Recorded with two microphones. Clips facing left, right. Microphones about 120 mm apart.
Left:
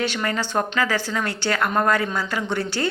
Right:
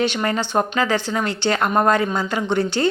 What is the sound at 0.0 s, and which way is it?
A woman's voice, 25° right (ahead or behind).